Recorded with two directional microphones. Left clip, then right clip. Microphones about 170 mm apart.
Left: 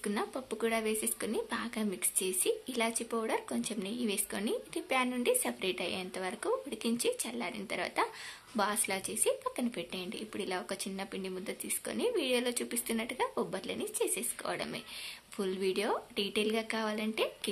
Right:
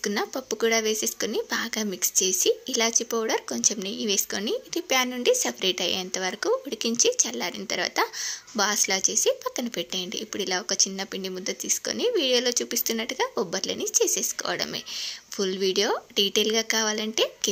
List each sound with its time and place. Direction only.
0.0 s speech: 30° right (ahead or behind)